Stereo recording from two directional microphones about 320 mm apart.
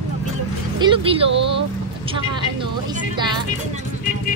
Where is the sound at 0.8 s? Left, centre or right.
Centre.